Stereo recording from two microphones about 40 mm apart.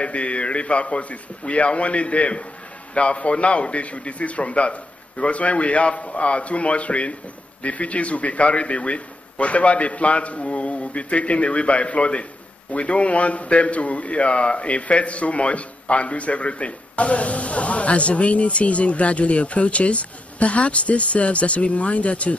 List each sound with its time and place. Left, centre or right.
0.0 s a man's voice: left